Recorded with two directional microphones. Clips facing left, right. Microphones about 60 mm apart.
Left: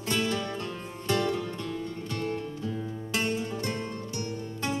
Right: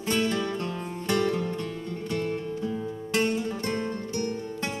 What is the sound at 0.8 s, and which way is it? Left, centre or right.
Music, right.